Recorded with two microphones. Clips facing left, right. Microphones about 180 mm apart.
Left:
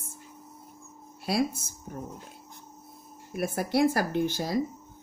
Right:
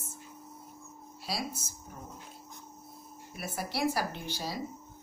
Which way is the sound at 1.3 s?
55° left (ahead or behind).